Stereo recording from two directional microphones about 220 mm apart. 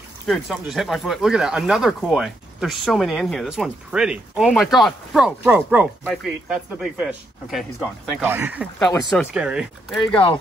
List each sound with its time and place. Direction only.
0.3 s speech: centre (ahead or behind)
8.7 s speech: 5° left (ahead or behind)